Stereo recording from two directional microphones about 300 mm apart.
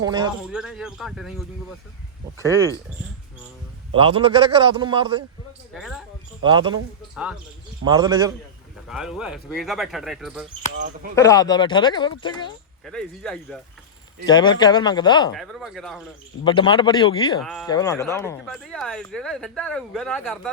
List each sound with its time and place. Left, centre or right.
0.0 s a man's voice: centre
0.5 s a man's voice: centre
3.9 s a man's voice: centre
5.7 s speech: centre
6.4 s a man's voice: centre
7.9 s a man's voice: centre
8.9 s speech: centre
11.1 s speech: centre
12.8 s speech: centre
14.3 s speech: centre
15.4 s speech: centre
16.4 s speech: centre
17.4 s speech: centre
17.7 s speech: centre